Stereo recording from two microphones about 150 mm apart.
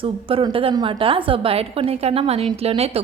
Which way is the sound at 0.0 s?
35° right (ahead or behind).